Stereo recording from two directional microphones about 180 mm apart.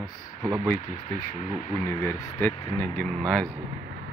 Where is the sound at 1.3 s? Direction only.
45° left (ahead or behind).